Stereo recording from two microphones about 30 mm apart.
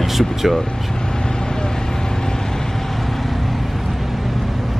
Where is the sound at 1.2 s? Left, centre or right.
Left.